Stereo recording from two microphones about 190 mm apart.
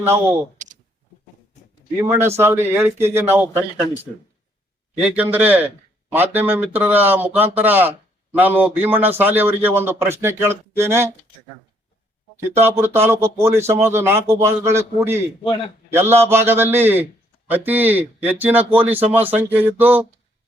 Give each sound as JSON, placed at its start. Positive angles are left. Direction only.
{"t": 0.0, "sound": "a man's voice", "side_deg": -15}
{"t": 2.0, "sound": "a man's voice", "side_deg": -15}
{"t": 4.9, "sound": "a man's voice", "side_deg": -10}
{"t": 12.5, "sound": "a man's voice", "side_deg": -10}